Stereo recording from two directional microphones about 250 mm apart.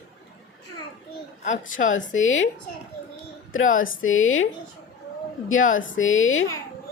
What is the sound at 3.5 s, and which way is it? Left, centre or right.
Speech, left.